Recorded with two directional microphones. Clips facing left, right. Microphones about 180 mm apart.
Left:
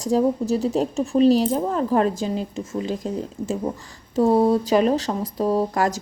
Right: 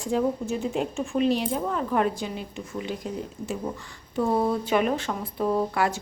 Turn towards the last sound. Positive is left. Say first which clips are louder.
# left 4 dB
turn(degrees=40)  # may be behind; listen again after turning